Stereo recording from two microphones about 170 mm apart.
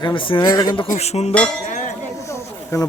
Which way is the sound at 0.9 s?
40° left (ahead or behind).